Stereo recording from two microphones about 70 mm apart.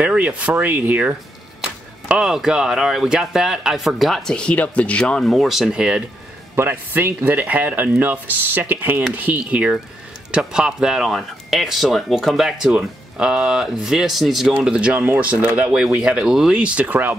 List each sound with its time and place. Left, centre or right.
0.0 s speech: centre
2.0 s speech: centre
5.2 s speech: centre
6.5 s speech: right; by 14.5 s centre
14.6 s speech: centre